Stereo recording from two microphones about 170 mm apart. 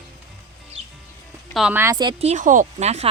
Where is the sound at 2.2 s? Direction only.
45° right (ahead or behind).